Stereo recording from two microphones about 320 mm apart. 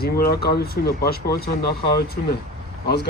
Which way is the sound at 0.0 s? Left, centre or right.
Left.